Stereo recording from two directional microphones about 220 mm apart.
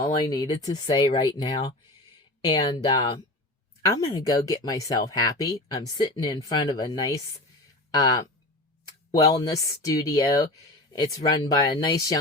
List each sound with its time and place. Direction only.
0.0 s speech: 20° left (ahead or behind)